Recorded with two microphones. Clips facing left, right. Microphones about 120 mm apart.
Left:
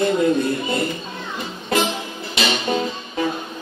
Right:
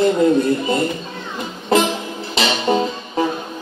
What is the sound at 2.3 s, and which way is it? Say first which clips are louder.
Music: right 4 dB; 30° right (ahead or behind).